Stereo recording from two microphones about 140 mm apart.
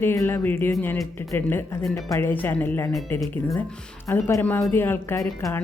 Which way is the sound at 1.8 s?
Centre (ahead or behind).